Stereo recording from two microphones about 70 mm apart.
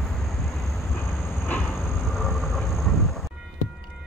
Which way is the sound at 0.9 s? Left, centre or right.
Left.